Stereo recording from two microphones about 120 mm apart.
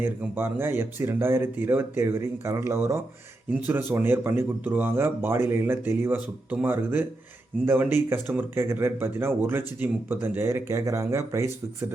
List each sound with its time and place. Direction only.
0.0 s speech: 20° right (ahead or behind)